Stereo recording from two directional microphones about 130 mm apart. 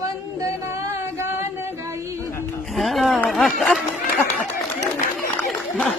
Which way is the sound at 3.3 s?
Centre (ahead or behind).